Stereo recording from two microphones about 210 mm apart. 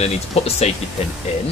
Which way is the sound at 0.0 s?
30° left (ahead or behind).